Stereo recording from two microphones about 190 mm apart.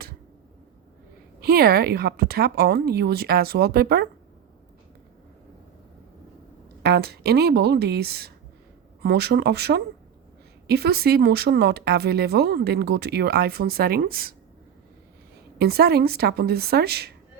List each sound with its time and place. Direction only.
1.4 s speech: 55° right (ahead or behind)
6.8 s speech: 60° right (ahead or behind)
15.5 s speech: 55° right (ahead or behind)